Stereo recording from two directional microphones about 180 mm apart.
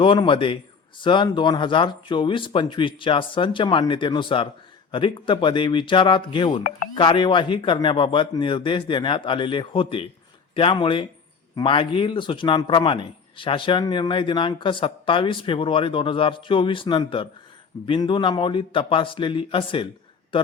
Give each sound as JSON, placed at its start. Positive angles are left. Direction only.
{"t": 0.0, "sound": "a man's voice", "side_deg": 30}